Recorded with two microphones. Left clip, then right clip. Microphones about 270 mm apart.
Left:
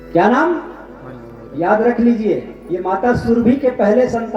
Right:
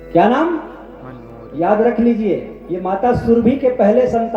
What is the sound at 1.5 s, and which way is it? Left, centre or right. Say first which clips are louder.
Speech: even; right.